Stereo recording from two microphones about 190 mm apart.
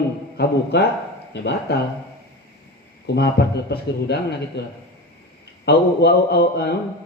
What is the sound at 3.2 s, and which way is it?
A man's voice, 60° left (ahead or behind).